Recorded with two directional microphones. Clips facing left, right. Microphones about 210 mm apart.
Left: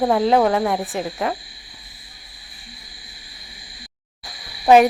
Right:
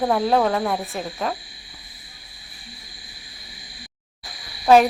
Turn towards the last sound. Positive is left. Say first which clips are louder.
# left 2 dB
turn(degrees=10)  # may be behind; listen again after turning